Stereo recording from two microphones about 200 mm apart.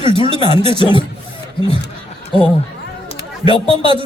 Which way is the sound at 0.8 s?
25° left (ahead or behind).